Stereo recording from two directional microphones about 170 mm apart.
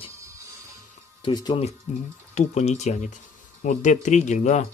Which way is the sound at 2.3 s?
45° left (ahead or behind).